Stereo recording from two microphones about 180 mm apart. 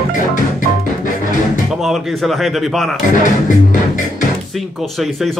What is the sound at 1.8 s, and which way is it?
Speech, centre (ahead or behind).